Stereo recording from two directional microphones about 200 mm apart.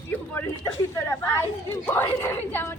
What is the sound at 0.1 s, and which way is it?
Speech, 10° left (ahead or behind).